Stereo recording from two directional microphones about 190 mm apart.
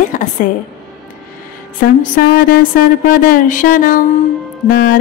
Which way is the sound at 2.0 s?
45° left (ahead or behind).